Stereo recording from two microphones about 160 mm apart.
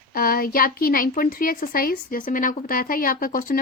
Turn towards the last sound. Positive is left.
turn(degrees=65)  # may be behind; listen again after turning